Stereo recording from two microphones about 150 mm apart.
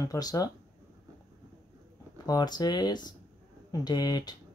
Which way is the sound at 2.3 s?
25° left (ahead or behind).